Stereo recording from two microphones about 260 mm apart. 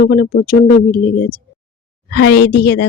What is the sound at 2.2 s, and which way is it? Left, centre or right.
Speech, left.